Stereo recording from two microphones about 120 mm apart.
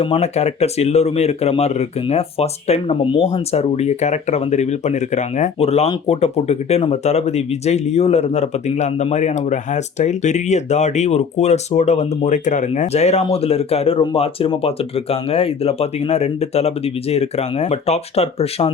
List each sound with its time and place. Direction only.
0.0 s speech: 60° left (ahead or behind)
9.1 s speech: 75° left (ahead or behind); by 18.7 s 55° left (ahead or behind)